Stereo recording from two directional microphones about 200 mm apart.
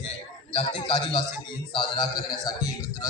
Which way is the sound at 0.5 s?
25° left (ahead or behind).